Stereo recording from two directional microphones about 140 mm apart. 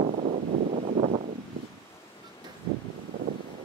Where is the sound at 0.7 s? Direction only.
60° right (ahead or behind).